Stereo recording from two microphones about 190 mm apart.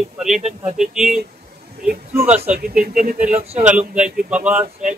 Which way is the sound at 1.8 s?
55° right (ahead or behind).